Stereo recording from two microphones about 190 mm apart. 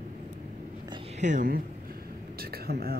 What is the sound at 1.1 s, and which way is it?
Speech, 40° right (ahead or behind).